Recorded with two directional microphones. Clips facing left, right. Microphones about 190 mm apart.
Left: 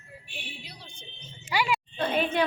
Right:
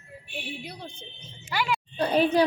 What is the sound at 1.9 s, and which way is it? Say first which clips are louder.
Speech: right 6 dB; 35° right (ahead or behind).